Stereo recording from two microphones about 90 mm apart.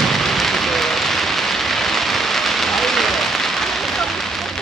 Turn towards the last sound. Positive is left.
turn(degrees=0)  # may be behind; listen again after turning